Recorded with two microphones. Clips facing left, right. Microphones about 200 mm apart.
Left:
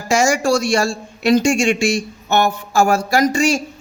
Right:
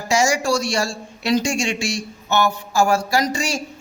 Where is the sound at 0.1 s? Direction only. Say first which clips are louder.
Left 3 dB; 55° left (ahead or behind).